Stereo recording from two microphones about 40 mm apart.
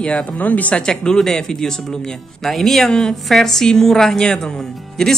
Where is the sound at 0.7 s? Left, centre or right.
Left.